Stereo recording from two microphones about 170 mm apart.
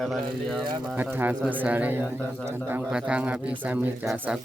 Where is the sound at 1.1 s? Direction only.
10° right (ahead or behind).